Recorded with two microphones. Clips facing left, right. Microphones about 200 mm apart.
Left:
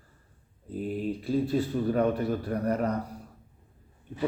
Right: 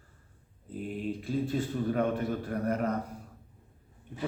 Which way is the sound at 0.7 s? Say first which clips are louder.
Left 4 dB; 40° left (ahead or behind).